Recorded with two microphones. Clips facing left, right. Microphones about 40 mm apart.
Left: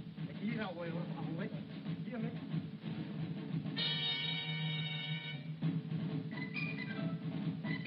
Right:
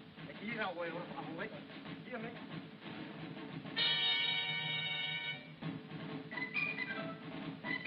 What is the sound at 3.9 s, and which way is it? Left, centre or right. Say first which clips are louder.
Music: right 6 dB; right.